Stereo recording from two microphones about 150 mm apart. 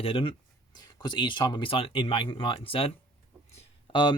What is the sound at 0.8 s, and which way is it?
Speech, 30° left (ahead or behind).